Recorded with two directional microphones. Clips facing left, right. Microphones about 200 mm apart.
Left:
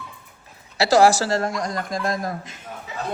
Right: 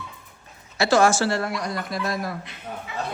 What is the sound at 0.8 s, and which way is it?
A man's voice, 35° left (ahead or behind).